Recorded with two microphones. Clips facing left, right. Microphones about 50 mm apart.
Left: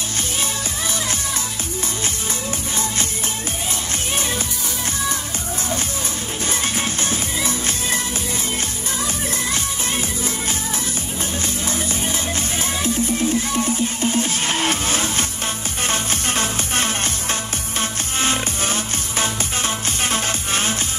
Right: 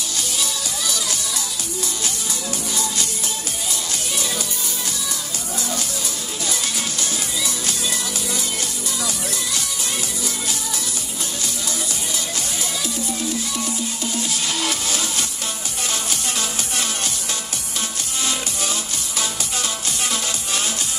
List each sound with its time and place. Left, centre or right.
7.0 s music: left
12.8 s music: left